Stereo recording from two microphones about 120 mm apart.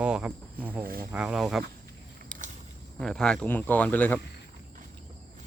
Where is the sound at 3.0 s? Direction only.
5° left (ahead or behind).